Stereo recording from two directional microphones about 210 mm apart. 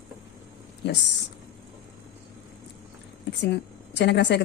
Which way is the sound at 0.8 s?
55° left (ahead or behind).